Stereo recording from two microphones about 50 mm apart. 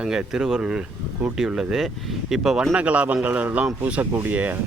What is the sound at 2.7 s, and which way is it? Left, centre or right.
Speech, right.